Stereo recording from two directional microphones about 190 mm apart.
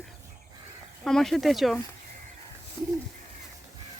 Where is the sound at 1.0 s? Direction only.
Centre (ahead or behind).